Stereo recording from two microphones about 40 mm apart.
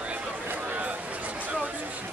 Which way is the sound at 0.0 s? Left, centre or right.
Right.